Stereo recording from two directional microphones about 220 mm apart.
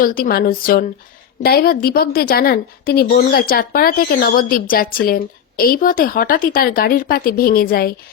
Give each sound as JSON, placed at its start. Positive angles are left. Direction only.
{"t": 0.0, "sound": "a woman's voice", "side_deg": 40}